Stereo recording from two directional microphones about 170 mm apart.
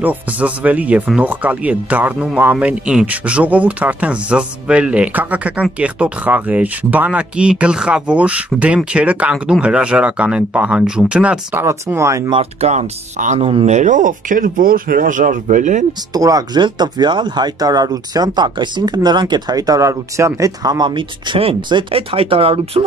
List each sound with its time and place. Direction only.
0.0 s speech: 10° right (ahead or behind)
12.4 s speech: 40° right (ahead or behind)
16.1 s speech: 20° right (ahead or behind)